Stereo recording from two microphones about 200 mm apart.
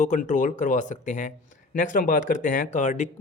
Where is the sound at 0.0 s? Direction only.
40° left (ahead or behind).